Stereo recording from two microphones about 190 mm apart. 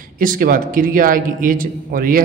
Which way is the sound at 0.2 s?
50° right (ahead or behind).